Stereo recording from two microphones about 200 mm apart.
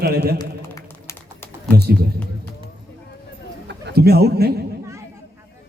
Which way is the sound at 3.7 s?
55° right (ahead or behind).